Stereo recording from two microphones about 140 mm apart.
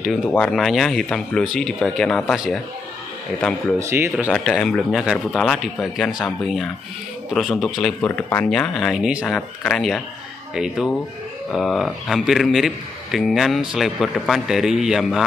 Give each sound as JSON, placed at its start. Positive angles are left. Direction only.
{"t": 0.3, "sound": "a man's voice", "side_deg": 5}
{"t": 3.8, "sound": "speech", "side_deg": -20}
{"t": 4.3, "sound": "a man's voice", "side_deg": 5}